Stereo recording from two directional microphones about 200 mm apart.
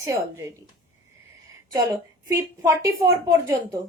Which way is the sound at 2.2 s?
15° right (ahead or behind).